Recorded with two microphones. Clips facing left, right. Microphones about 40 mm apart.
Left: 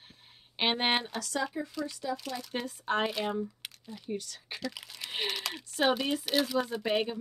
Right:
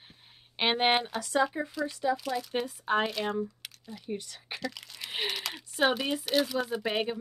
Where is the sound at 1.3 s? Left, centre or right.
Right.